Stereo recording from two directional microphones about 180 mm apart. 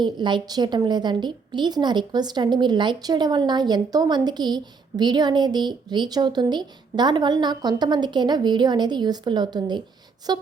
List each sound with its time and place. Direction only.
0.0 s a woman's voice: 25° right (ahead or behind)